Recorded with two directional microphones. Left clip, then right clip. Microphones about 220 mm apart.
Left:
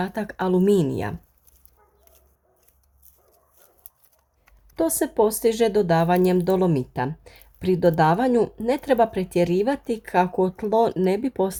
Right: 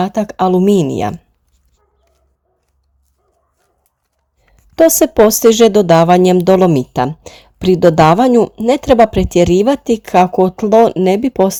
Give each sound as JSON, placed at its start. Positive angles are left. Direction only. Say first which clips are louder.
{"t": 0.0, "sound": "speech", "louder": "right 12 dB", "side_deg": -25}
{"t": 4.7, "sound": "speech", "louder": "right 14 dB", "side_deg": -35}